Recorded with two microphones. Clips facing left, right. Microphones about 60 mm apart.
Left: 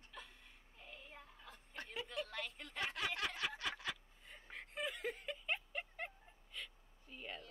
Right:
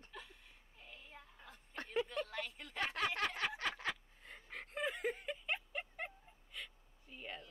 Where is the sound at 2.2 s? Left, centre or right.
Centre.